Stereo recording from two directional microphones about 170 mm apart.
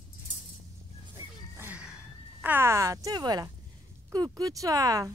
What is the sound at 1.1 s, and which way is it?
Music, 10° right (ahead or behind).